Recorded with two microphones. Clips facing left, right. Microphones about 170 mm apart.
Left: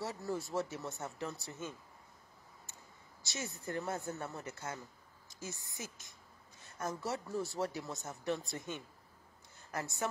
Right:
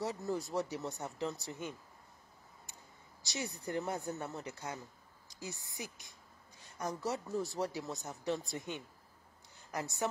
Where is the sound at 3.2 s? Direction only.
15° right (ahead or behind).